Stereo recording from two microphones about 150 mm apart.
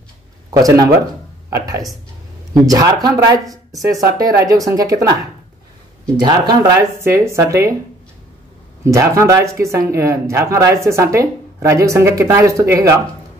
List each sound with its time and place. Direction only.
0.5 s speech: 25° right (ahead or behind)
6.2 s speech: 30° right (ahead or behind)
8.8 s speech: 20° right (ahead or behind)